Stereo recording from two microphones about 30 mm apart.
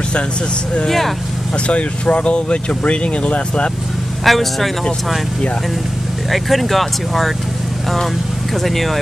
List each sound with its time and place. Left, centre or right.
0.8 s speech: centre
1.7 s speech: left
4.2 s speech: centre
6.3 s speech: centre
8.6 s speech: centre